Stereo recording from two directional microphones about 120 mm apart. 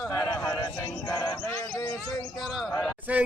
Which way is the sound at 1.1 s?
30° left (ahead or behind).